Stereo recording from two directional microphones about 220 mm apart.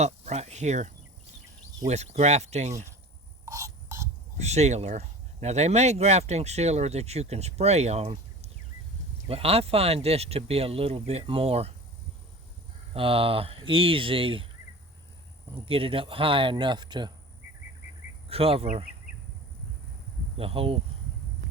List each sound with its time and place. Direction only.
0.0 s speech: 30° right (ahead or behind)
3.4 s a sound: 15° right (ahead or behind)
4.4 s speech: 30° right (ahead or behind)
12.9 s speech: 25° right (ahead or behind)
15.6 s speech: 25° right (ahead or behind)
18.3 s speech: 25° right (ahead or behind)
20.4 s speech: 25° right (ahead or behind)